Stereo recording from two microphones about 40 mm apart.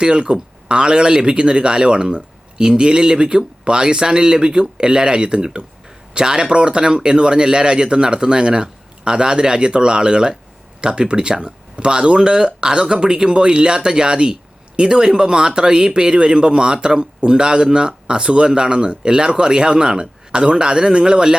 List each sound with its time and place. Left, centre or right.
0.0 s a man's voice: right